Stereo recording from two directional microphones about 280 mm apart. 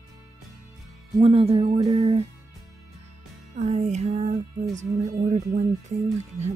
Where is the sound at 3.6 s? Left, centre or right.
Right.